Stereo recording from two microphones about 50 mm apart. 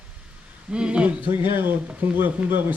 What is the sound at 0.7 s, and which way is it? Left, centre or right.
Speech, right.